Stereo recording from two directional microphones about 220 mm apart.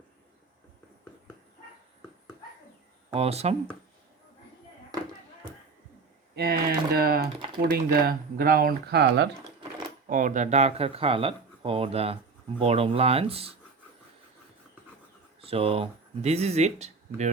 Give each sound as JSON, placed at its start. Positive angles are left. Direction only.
{"t": 3.1, "sound": "speech", "side_deg": -30}
{"t": 6.3, "sound": "speech", "side_deg": -45}
{"t": 10.1, "sound": "speech", "side_deg": -35}
{"t": 15.4, "sound": "speech", "side_deg": -25}